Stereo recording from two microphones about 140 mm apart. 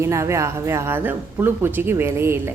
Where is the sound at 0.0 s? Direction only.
20° right (ahead or behind).